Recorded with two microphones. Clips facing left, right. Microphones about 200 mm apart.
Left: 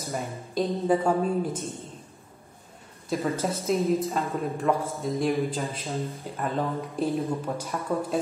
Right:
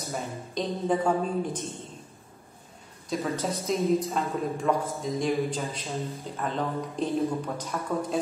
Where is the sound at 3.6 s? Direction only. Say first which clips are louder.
Left 1 dB; centre (ahead or behind).